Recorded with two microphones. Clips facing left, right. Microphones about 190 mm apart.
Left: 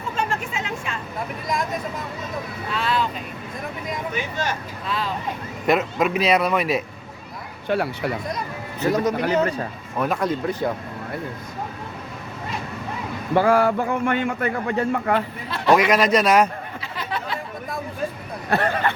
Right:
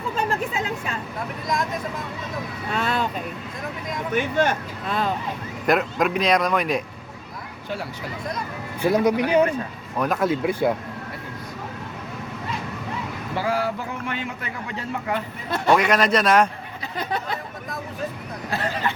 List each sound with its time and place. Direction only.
0.2 s a sound: 35° right (ahead or behind)
2.7 s speech: 50° right (ahead or behind)
4.1 s speech: 55° right (ahead or behind)
5.6 s speech: centre (ahead or behind)
7.7 s speech: 65° left (ahead or behind)
8.8 s speech: 10° right (ahead or behind)
10.0 s speech: centre (ahead or behind)
13.3 s a man's voice: 55° left (ahead or behind)
15.7 s a man's voice: 10° left (ahead or behind)
17.0 s chatter: 45° right (ahead or behind)
18.5 s speech: 60° left (ahead or behind)